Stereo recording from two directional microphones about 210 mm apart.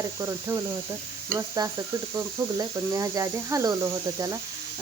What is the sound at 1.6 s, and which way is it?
Speech, 20° right (ahead or behind).